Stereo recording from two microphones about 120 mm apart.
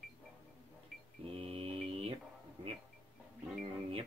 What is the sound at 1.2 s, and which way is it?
Mantra, 50° right (ahead or behind).